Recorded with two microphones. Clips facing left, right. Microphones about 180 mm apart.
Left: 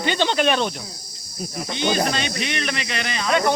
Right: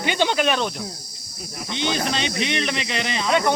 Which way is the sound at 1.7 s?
25° right (ahead or behind).